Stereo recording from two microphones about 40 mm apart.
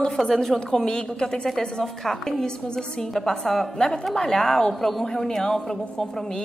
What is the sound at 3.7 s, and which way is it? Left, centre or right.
A woman's voice, centre.